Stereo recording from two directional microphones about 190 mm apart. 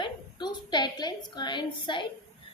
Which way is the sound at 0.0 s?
25° left (ahead or behind).